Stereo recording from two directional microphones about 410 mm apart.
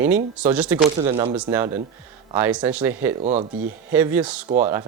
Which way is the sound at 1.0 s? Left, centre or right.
Centre.